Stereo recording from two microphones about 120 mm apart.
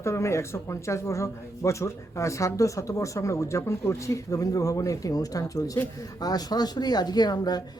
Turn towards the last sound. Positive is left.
turn(degrees=35)  # may be behind; listen again after turning